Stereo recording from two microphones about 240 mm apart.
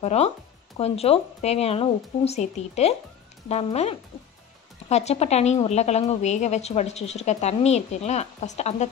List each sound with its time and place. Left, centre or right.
0.0 s a woman's voice: left